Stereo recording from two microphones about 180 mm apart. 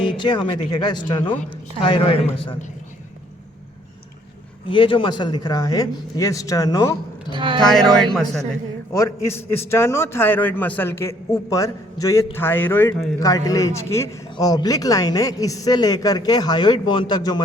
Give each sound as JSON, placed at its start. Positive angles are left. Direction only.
{"t": 0.0, "sound": "speech", "side_deg": 25}
{"t": 1.2, "sound": "a man's voice", "side_deg": 10}
{"t": 1.8, "sound": "a man's voice", "side_deg": 30}
{"t": 4.6, "sound": "speech", "side_deg": 30}
{"t": 7.3, "sound": "speech", "side_deg": -25}
{"t": 7.6, "sound": "a man's voice", "side_deg": 5}
{"t": 8.9, "sound": "a man's voice", "side_deg": 15}